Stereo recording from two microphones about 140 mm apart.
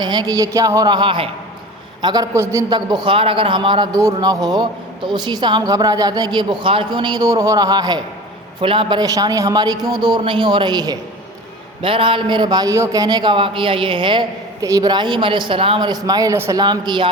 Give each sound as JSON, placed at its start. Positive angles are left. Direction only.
{"t": 0.0, "sound": "a man's voice", "side_deg": -30}
{"t": 2.3, "sound": "speech", "side_deg": -20}
{"t": 14.6, "sound": "speech", "side_deg": -25}